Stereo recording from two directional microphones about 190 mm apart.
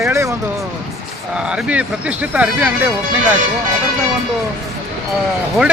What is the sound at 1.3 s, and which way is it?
Speech, 5° right (ahead or behind).